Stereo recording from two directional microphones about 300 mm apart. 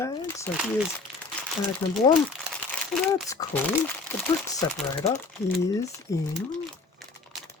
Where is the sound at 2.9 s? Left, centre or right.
Centre.